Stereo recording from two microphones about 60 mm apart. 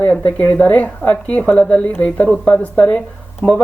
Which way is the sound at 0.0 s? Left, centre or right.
Left.